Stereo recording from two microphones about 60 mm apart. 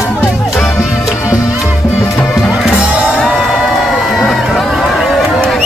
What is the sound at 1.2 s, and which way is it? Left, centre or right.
Music, left.